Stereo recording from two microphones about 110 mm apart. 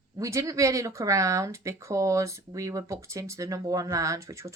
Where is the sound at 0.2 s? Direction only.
30° right (ahead or behind).